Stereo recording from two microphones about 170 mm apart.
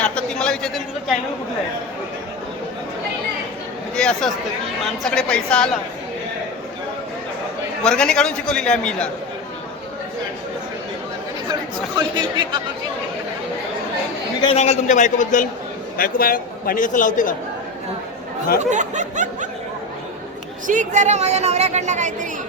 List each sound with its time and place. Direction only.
0.0 s a man's voice: 5° left (ahead or behind)
3.9 s a sound: 5° left (ahead or behind)
5.0 s a man's voice: 5° left (ahead or behind)
7.9 s a man's voice: 5° left (ahead or behind)
11.9 s speech: 25° right (ahead or behind)
14.4 s a man's voice: 40° left (ahead or behind)
16.0 s a man's voice: 60° left (ahead or behind)
18.6 s a woman's voice: 45° right (ahead or behind)
20.7 s a woman's voice: 45° right (ahead or behind)